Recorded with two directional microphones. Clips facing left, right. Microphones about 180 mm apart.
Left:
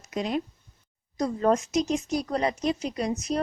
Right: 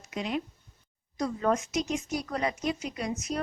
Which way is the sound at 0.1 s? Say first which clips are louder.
Left 4 dB; 40° left (ahead or behind).